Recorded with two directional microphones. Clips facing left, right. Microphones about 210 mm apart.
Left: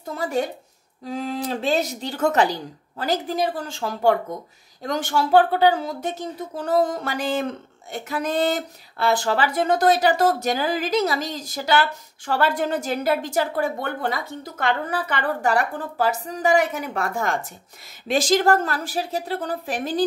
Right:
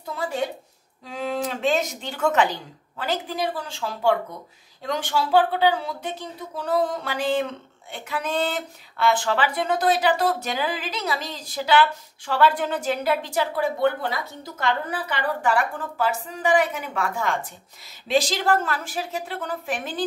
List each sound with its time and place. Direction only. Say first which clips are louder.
0.1 s a woman's voice: left 3 dB; 45° left (ahead or behind)
15.5 s a woman's voice: left 2 dB; 40° left (ahead or behind)